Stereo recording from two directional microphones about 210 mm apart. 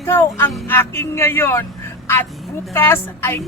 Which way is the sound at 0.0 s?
10° left (ahead or behind).